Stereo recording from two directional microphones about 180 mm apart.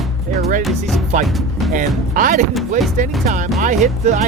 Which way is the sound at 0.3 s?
50° right (ahead or behind).